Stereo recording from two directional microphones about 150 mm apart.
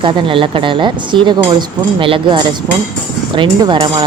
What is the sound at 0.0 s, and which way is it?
Speech, 35° right (ahead or behind).